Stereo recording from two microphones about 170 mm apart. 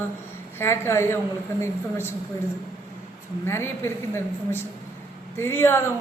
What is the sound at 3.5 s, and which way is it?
A woman's voice, 15° left (ahead or behind).